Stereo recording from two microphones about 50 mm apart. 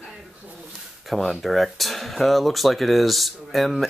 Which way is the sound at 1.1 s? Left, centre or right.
Centre.